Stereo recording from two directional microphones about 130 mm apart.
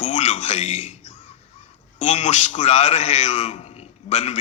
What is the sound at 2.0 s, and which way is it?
A man's voice, 60° left (ahead or behind).